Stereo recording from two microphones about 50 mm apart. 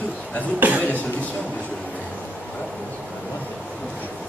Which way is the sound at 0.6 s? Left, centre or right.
Right.